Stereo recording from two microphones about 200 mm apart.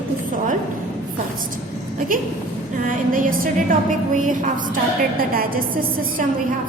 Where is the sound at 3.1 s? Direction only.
45° right (ahead or behind).